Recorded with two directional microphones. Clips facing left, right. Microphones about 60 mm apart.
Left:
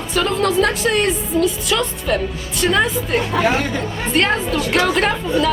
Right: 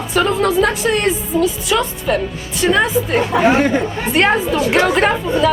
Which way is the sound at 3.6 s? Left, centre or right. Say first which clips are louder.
Right 6 dB; right.